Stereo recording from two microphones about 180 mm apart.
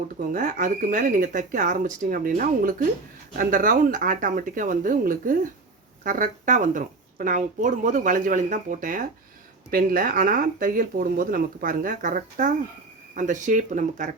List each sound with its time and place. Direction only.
0.3 s a woman's voice: 45° right (ahead or behind)